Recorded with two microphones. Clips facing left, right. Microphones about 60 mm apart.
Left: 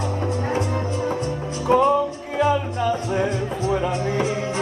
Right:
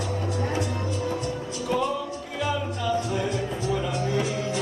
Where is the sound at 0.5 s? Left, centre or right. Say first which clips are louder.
Left 4 dB; left.